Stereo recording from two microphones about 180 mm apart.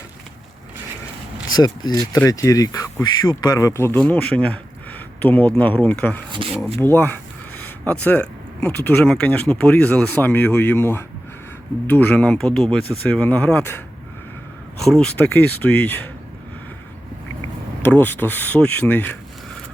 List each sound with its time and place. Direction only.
1.5 s speech: 20° left (ahead or behind)
6.3 s speech: 30° right (ahead or behind)
6.7 s speech: 10° left (ahead or behind)
14.8 s speech: centre (ahead or behind)
17.8 s speech: 10° left (ahead or behind)